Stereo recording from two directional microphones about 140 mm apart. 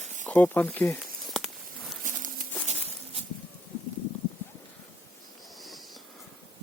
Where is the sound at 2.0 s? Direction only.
70° right (ahead or behind).